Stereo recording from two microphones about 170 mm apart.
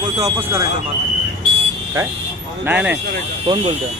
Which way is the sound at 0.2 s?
20° right (ahead or behind).